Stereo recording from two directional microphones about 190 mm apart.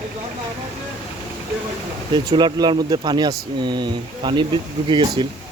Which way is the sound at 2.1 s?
25° right (ahead or behind).